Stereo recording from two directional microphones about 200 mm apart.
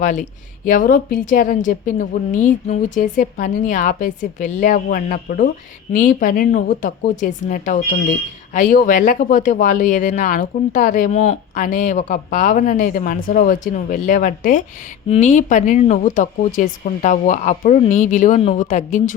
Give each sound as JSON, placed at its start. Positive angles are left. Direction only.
{"t": 0.0, "sound": "speech", "side_deg": 40}